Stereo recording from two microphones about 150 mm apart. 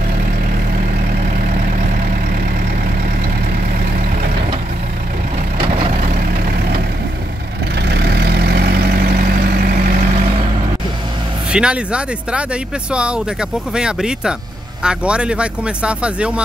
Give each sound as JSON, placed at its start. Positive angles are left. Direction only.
{"t": 7.9, "sound": "vehicle", "side_deg": -90}
{"t": 11.5, "sound": "speech", "side_deg": -5}